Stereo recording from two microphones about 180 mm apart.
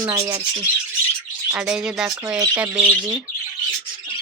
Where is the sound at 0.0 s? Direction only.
20° right (ahead or behind).